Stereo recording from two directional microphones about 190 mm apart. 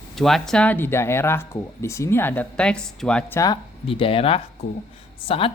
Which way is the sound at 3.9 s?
30° left (ahead or behind).